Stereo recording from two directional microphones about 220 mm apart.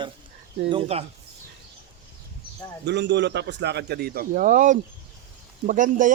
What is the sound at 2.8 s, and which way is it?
A man's voice, 55° right (ahead or behind).